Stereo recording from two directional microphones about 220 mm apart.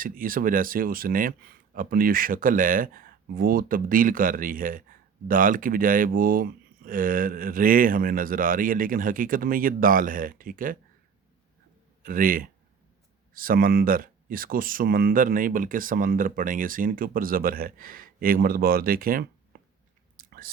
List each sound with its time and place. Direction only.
0.0 s speech: 40° right (ahead or behind)
12.0 s speech: 40° right (ahead or behind)
20.1 s chewing: 40° right (ahead or behind)